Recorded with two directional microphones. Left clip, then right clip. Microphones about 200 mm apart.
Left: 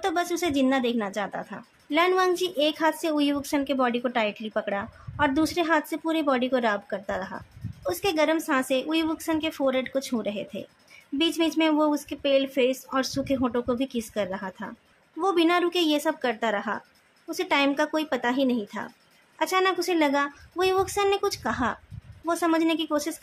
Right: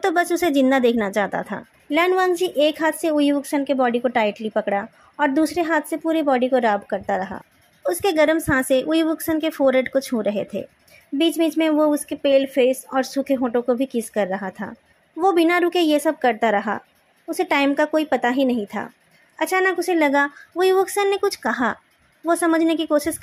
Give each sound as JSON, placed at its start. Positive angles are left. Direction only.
{"t": 0.0, "sound": "a woman's voice", "side_deg": -25}
{"t": 1.9, "sound": "a woman's voice", "side_deg": -20}